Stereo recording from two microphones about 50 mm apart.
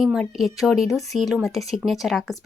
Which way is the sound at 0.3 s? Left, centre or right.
Centre.